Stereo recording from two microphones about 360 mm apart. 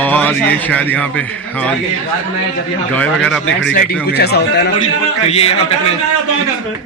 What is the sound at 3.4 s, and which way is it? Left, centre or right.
Speech, left.